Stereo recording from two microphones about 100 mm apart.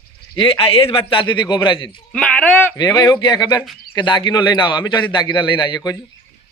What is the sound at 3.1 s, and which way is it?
A man's voice, 45° left (ahead or behind).